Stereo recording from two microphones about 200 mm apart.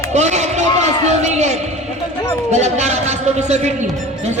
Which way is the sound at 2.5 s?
35° right (ahead or behind).